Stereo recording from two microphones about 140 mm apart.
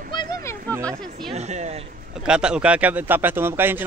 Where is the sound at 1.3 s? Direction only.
55° right (ahead or behind).